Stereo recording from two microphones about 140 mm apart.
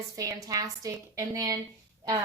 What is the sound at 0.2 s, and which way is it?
A woman's voice, 25° right (ahead or behind).